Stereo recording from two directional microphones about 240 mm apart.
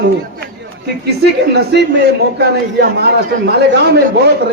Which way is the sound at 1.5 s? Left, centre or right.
Right.